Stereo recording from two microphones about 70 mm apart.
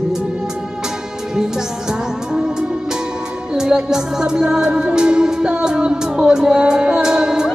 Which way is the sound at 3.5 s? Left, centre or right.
Centre.